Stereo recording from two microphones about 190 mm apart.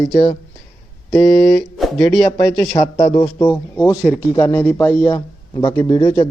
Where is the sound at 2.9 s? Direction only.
20° left (ahead or behind).